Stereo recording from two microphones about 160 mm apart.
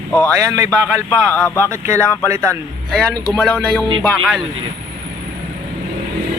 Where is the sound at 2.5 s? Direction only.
5° left (ahead or behind).